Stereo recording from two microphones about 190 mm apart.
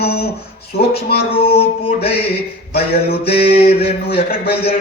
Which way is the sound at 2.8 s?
55° left (ahead or behind).